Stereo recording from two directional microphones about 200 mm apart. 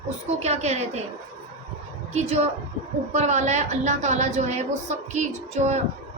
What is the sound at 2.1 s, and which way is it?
A woman's voice, 30° right (ahead or behind).